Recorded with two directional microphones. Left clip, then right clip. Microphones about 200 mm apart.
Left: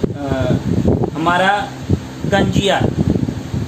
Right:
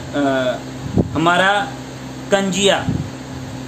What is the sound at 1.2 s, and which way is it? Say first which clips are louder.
Speech: even; 25° right (ahead or behind).